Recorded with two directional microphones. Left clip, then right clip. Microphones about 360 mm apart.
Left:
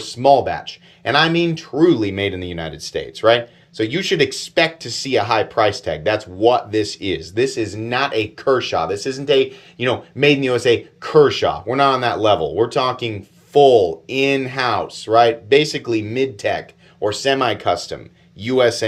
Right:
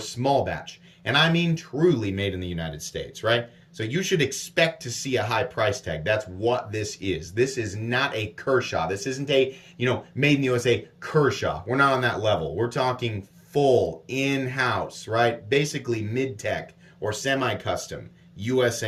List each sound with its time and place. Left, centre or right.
0.1 s speech: centre